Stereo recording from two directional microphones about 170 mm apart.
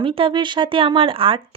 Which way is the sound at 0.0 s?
30° right (ahead or behind).